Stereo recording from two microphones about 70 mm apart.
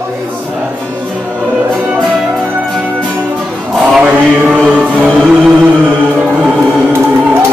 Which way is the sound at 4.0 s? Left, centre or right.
Right.